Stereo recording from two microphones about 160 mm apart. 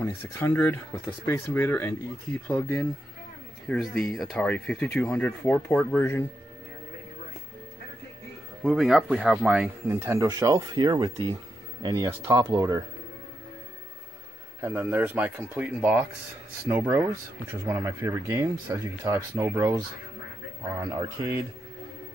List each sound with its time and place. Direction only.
0.0 s speech: 10° left (ahead or behind)
8.6 s speech: centre (ahead or behind); by 12.8 s 20° right (ahead or behind)
14.6 s speech: 10° right (ahead or behind)
20.9 s speech: 20° right (ahead or behind)